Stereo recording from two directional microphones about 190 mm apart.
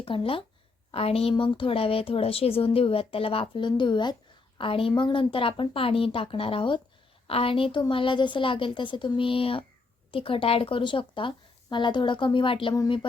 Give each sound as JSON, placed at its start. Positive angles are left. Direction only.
{"t": 0.0, "sound": "a woman's voice", "side_deg": 30}